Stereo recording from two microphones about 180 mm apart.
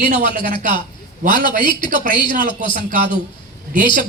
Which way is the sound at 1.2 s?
45° right (ahead or behind).